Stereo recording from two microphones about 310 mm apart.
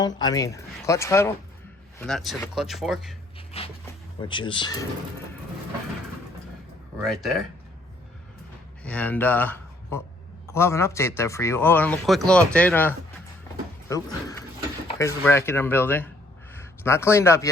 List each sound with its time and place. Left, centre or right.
0.0 s a man's voice: centre
3.3 s music: centre
4.2 s a man's voice: centre
7.0 s speech: centre
8.8 s a man's voice: centre